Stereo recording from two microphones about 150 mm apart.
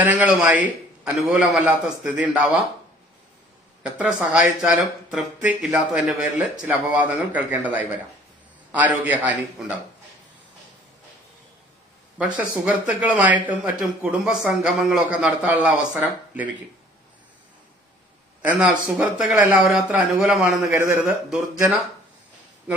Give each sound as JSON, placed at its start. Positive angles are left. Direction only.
{"t": 0.0, "sound": "speech", "side_deg": -10}
{"t": 3.8, "sound": "speech", "side_deg": -10}
{"t": 12.1, "sound": "speech", "side_deg": -5}
{"t": 18.4, "sound": "a man's voice", "side_deg": -10}
{"t": 20.7, "sound": "speech", "side_deg": -15}